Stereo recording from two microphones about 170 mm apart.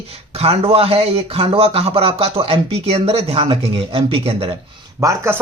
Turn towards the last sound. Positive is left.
turn(degrees=-15)  # may be behind; listen again after turning